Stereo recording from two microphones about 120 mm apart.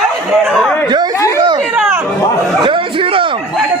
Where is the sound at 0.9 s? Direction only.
35° right (ahead or behind).